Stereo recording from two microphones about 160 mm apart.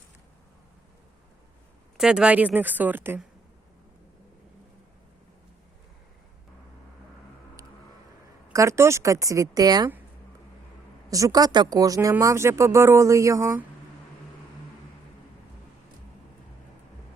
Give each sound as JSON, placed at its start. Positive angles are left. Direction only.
{"t": 2.0, "sound": "speech", "side_deg": -5}
{"t": 8.5, "sound": "speech", "side_deg": -15}
{"t": 11.1, "sound": "speech", "side_deg": -20}